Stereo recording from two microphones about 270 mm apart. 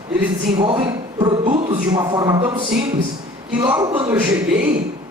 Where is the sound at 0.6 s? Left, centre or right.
Centre.